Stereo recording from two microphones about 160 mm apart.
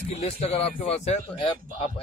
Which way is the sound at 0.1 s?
40° left (ahead or behind).